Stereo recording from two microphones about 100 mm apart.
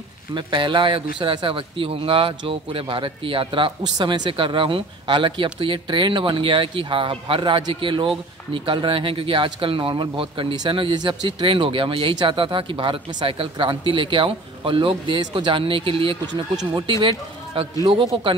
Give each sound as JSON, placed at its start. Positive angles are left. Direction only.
{"t": 0.3, "sound": "a man's voice", "side_deg": -50}
{"t": 16.3, "sound": "speech", "side_deg": -45}
{"t": 17.0, "sound": "speech", "side_deg": -60}